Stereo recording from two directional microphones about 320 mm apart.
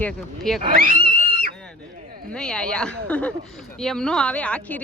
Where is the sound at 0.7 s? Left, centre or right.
Right.